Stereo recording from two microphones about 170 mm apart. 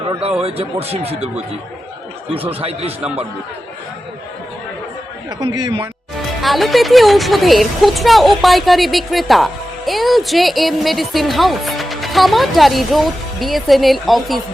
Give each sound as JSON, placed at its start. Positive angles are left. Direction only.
{"t": 0.2, "sound": "speech", "side_deg": -35}
{"t": 2.3, "sound": "speech", "side_deg": -35}
{"t": 5.4, "sound": "a man's voice", "side_deg": -25}
{"t": 6.4, "sound": "a woman's voice", "side_deg": 0}